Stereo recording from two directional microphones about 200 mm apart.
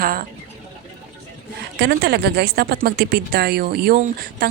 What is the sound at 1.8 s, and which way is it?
Speech, 55° right (ahead or behind).